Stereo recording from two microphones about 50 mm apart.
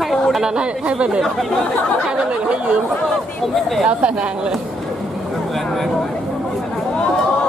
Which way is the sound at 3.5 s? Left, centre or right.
Centre.